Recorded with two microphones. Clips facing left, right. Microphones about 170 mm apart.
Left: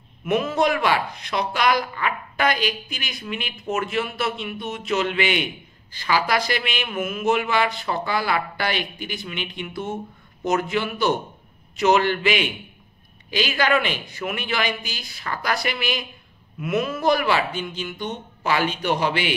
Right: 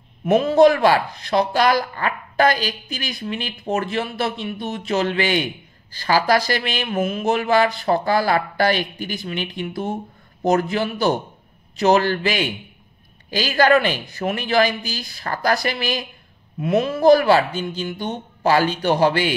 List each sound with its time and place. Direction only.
0.2 s speech: 30° right (ahead or behind)